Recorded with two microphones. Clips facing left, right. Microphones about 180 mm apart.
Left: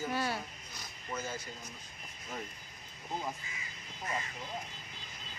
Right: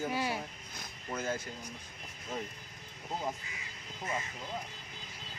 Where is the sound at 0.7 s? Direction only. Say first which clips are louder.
Even; 55° right (ahead or behind).